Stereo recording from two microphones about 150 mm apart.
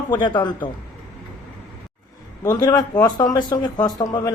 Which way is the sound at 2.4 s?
25° left (ahead or behind).